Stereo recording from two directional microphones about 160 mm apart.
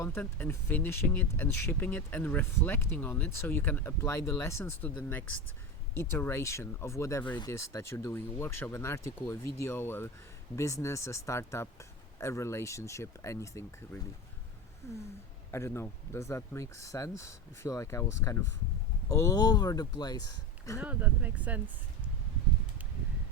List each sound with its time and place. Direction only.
0.0 s speech: 15° left (ahead or behind)
20.7 s speech: 10° right (ahead or behind)